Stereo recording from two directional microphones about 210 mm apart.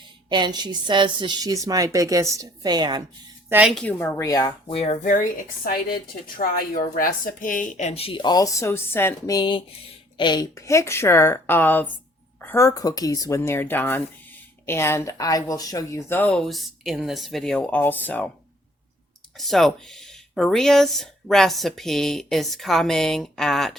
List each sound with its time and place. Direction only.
0.3 s a woman's voice: 20° right (ahead or behind)
3.5 s speech: 5° right (ahead or behind)
3.9 s speech: 10° left (ahead or behind)
19.4 s speech: centre (ahead or behind)